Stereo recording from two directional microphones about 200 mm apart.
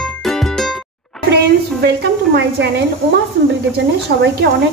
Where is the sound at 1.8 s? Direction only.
55° right (ahead or behind).